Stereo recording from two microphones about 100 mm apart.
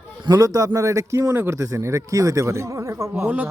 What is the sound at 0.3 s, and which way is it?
A man's voice, 35° right (ahead or behind).